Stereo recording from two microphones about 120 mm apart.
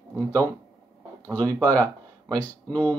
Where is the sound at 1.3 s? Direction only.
15° left (ahead or behind).